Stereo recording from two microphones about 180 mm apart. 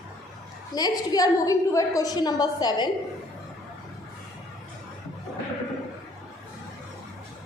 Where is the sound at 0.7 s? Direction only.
20° left (ahead or behind).